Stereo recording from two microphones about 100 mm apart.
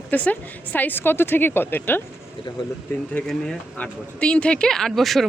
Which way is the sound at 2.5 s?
35° left (ahead or behind).